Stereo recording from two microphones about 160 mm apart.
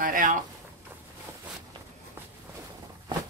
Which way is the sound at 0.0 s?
55° right (ahead or behind).